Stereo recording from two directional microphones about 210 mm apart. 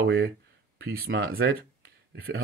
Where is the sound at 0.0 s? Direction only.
50° right (ahead or behind).